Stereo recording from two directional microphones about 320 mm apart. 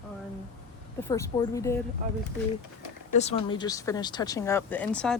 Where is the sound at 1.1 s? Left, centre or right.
Centre.